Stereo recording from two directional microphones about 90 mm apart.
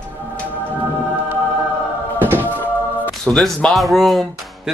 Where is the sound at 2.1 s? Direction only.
20° right (ahead or behind).